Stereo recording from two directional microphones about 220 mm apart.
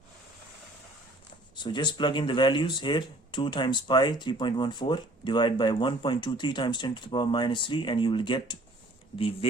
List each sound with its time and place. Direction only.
1.5 s speech: 20° left (ahead or behind)